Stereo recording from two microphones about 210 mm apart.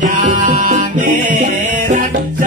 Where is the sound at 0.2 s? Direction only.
40° right (ahead or behind).